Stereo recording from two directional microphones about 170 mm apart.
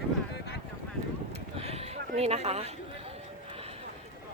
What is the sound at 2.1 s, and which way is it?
Speech, 40° right (ahead or behind).